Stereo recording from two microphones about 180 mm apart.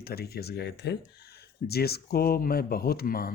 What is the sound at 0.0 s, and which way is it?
Speech, 60° left (ahead or behind).